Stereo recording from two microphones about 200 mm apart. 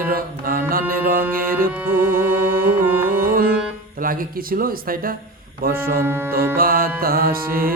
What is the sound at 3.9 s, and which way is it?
Music, 45° right (ahead or behind).